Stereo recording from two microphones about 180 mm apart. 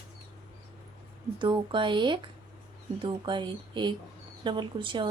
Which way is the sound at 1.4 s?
25° right (ahead or behind).